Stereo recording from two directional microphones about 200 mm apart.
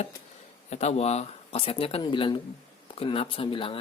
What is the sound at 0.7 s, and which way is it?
Speech, 35° left (ahead or behind).